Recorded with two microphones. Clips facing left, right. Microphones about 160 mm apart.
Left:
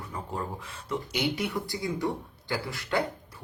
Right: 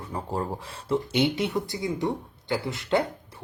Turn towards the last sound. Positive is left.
turn(degrees=-20)  # may be behind; listen again after turning